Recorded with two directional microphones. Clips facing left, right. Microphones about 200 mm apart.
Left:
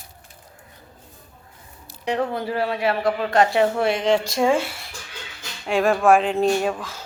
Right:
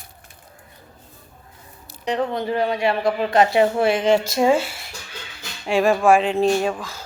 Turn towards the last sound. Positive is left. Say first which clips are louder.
# right 1 dB
turn(degrees=0)  # may be behind; listen again after turning